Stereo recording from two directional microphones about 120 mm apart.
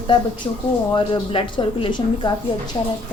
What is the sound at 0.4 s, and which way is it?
Speech, 35° left (ahead or behind).